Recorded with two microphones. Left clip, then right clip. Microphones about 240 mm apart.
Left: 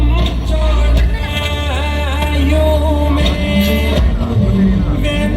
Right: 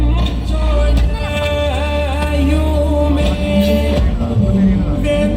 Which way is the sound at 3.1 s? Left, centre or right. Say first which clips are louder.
Even; left.